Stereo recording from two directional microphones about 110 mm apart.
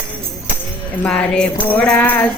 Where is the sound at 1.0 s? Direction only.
10° left (ahead or behind).